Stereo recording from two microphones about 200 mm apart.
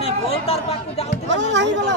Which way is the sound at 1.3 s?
65° right (ahead or behind).